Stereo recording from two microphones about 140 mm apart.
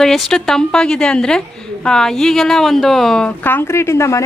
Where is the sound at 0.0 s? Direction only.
5° left (ahead or behind).